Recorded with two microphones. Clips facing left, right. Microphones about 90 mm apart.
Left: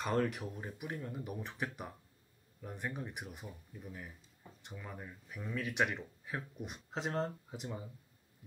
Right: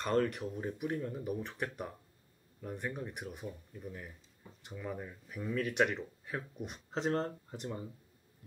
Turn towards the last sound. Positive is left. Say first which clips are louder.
# right 2 dB
turn(degrees=0)  # may be behind; listen again after turning